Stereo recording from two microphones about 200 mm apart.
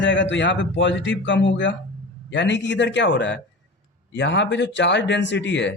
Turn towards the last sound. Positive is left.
turn(degrees=60)  # may be behind; listen again after turning